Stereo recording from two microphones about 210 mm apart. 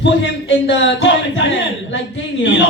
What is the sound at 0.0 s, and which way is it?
Speech, 60° left (ahead or behind).